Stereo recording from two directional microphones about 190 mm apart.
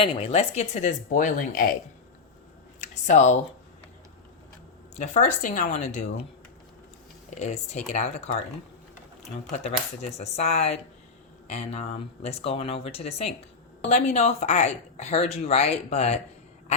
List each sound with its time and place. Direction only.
0.0 s speech: 30° left (ahead or behind); by 1.7 s 50° left (ahead or behind)
2.8 s a sound: 35° left (ahead or behind)
4.9 s speech: 40° left (ahead or behind)
7.3 s speech: 35° left (ahead or behind)
9.5 s speech: 35° left (ahead or behind)